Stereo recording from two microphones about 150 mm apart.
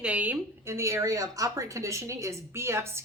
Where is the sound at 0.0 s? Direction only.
10° right (ahead or behind).